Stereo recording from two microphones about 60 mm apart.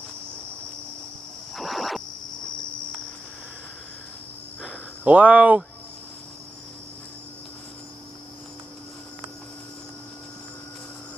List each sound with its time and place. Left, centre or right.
1.5 s music: centre
5.0 s speech: right